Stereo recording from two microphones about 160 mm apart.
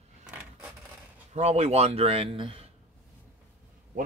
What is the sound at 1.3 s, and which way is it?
Speech, 40° right (ahead or behind).